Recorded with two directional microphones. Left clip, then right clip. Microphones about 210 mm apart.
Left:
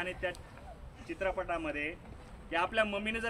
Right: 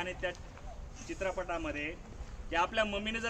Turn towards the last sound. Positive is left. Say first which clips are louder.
# left 1 dB
turn(degrees=10)  # may be behind; listen again after turning